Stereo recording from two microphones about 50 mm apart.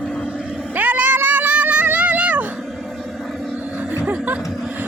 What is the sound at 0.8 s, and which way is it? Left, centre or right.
Cat, right.